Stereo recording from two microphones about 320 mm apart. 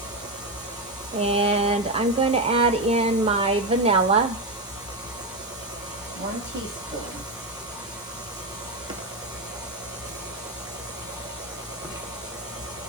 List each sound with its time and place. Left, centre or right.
1.2 s speech: centre